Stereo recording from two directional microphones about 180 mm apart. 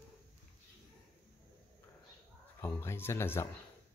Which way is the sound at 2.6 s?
15° left (ahead or behind).